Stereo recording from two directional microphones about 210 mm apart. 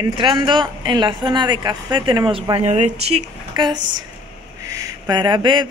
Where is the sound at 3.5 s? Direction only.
20° right (ahead or behind).